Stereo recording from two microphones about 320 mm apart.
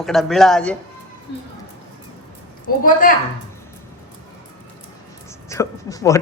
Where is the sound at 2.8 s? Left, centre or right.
Left.